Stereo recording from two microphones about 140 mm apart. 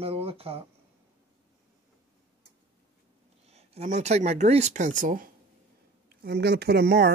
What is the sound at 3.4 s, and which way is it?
Speech, 50° right (ahead or behind).